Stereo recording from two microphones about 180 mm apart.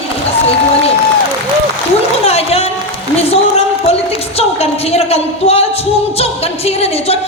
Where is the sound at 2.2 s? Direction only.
35° left (ahead or behind).